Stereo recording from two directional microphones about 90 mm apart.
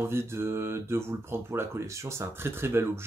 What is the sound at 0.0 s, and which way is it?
Speech, 30° right (ahead or behind).